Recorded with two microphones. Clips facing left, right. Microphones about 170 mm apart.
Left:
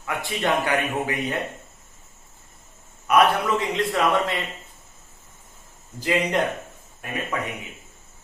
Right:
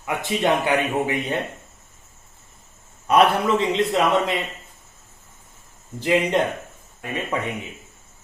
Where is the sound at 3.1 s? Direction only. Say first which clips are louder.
Right 2 dB; 30° right (ahead or behind).